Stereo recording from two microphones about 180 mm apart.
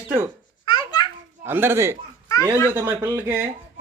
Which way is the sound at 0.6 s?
25° left (ahead or behind).